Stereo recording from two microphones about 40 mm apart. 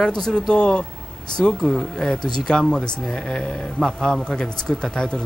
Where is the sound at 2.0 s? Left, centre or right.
Centre.